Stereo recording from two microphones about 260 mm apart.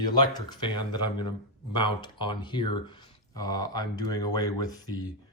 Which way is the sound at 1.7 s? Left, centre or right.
Centre.